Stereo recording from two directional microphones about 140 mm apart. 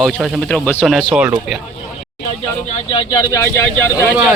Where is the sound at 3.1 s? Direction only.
20° left (ahead or behind).